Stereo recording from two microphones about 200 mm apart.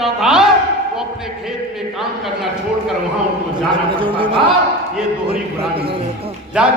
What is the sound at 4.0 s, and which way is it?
Speech, 25° right (ahead or behind).